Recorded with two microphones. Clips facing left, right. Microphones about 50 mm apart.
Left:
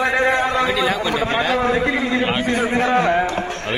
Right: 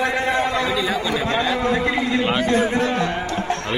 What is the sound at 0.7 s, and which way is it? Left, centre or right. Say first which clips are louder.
Speech: left 3 dB; left.